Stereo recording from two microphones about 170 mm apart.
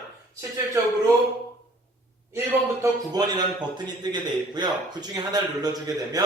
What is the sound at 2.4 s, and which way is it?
A man's voice, 20° right (ahead or behind).